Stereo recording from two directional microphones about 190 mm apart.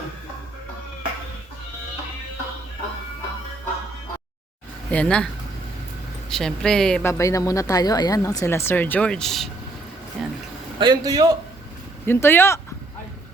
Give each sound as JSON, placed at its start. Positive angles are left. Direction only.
{"t": 4.9, "sound": "a woman's voice", "side_deg": 5}
{"t": 6.3, "sound": "a woman's voice", "side_deg": 0}
{"t": 7.1, "sound": "speech", "side_deg": 15}
{"t": 10.8, "sound": "a man's voice", "side_deg": -20}
{"t": 12.0, "sound": "speech", "side_deg": 10}